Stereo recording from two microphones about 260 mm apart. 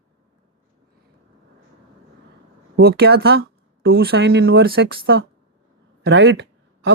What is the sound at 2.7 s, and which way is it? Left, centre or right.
Speech, right.